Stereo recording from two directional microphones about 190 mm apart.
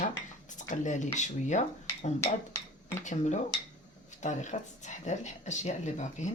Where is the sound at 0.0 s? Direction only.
40° left (ahead or behind).